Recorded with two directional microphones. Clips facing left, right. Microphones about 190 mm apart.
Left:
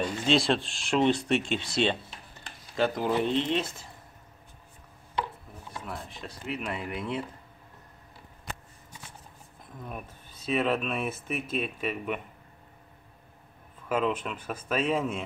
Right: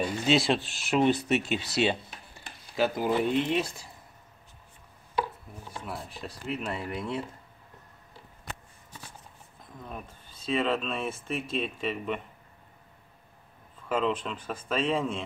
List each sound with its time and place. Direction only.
0.0 s speech: 5° right (ahead or behind)
5.9 s speech: 5° right (ahead or behind)
6.7 s speech: 15° left (ahead or behind)
9.8 s speech: 10° left (ahead or behind)
13.8 s speech: 5° left (ahead or behind)